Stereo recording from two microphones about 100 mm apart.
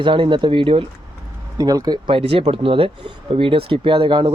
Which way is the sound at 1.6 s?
40° right (ahead or behind).